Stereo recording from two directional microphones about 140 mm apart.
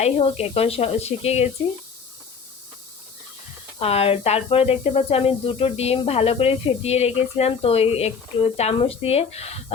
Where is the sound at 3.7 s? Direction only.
45° left (ahead or behind).